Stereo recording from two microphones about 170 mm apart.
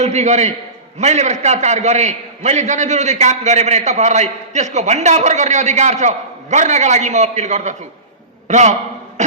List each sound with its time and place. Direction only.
0.0 s a man's voice: 40° right (ahead or behind)